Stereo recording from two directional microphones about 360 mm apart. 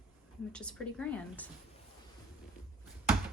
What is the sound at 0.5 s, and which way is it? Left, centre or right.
Speech, centre.